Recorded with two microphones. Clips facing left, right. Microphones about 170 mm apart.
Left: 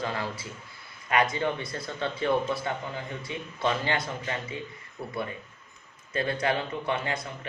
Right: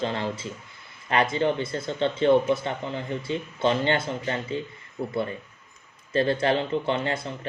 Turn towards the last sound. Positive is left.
turn(degrees=-30)  # may be behind; listen again after turning